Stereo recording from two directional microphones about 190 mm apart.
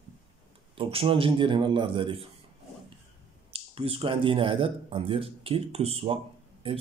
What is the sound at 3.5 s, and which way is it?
Speech, 30° right (ahead or behind).